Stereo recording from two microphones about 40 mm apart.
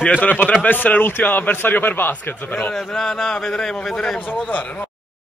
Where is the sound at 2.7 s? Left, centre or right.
Centre.